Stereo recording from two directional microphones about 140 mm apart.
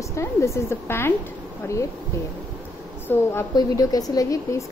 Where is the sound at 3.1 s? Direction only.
15° left (ahead or behind).